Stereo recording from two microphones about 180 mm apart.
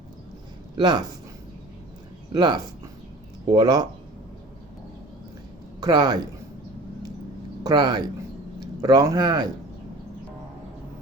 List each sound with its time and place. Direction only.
0.8 s a man's voice: 25° right (ahead or behind)
2.3 s a man's voice: 25° right (ahead or behind)
3.6 s a man's voice: 20° right (ahead or behind)
5.8 s a man's voice: 20° right (ahead or behind)
7.6 s a man's voice: 25° right (ahead or behind)